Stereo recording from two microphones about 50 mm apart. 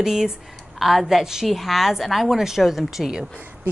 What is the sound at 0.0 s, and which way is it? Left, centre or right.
A woman's voice, centre.